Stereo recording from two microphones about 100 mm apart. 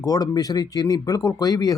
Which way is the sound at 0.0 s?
40° left (ahead or behind).